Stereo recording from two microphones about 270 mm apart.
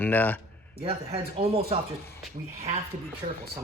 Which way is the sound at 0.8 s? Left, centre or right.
Right.